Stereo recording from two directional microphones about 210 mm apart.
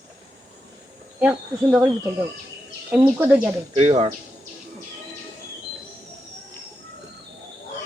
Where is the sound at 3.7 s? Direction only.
30° right (ahead or behind).